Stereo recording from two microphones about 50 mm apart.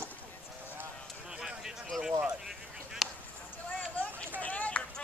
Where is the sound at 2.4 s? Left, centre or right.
Centre.